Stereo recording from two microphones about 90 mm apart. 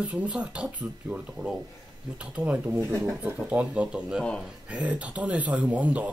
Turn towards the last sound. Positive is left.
turn(degrees=-15)  # may be behind; listen again after turning